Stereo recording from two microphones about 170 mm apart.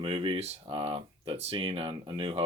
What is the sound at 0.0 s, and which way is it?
Speech, 30° right (ahead or behind).